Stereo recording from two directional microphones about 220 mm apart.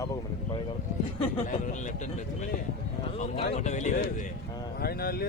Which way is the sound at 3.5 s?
35° left (ahead or behind).